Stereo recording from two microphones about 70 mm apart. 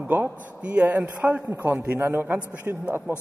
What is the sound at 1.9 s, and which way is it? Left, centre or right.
A man's voice, right.